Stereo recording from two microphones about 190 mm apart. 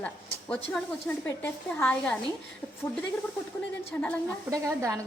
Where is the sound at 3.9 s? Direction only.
15° left (ahead or behind).